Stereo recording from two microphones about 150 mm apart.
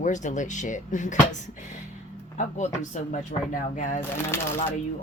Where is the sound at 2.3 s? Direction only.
55° left (ahead or behind).